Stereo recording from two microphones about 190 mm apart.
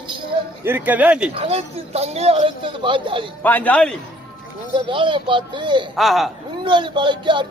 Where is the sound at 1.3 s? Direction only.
35° right (ahead or behind).